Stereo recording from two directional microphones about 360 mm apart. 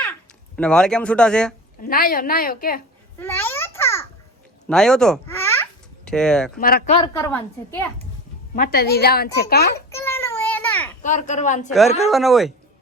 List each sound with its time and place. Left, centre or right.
0.5 s speech: centre
1.8 s speech: left
3.2 s babbling: centre
6.1 s speech: centre
6.6 s a woman's voice: left; by 7.9 s centre
8.5 s speech: left
9.9 s a sound: centre
11.0 s a woman's voice: left
12.1 s speech: centre